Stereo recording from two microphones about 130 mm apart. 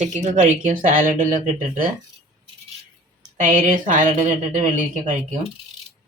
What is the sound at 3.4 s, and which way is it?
Speech, 75° right (ahead or behind).